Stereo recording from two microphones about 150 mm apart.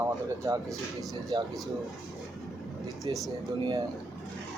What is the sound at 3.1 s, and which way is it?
Speech, 30° right (ahead or behind).